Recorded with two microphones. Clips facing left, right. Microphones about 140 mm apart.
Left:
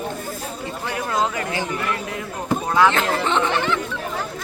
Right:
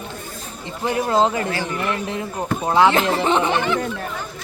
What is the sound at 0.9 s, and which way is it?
A woman's voice, 30° right (ahead or behind).